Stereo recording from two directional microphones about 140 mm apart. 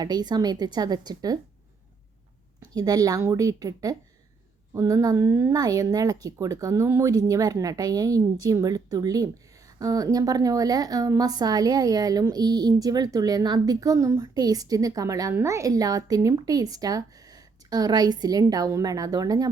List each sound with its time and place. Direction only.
0.0 s a woman's voice: 30° right (ahead or behind)
2.7 s a woman's voice: 25° right (ahead or behind)